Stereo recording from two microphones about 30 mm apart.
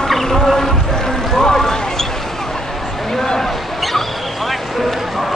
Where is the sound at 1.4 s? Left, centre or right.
Centre.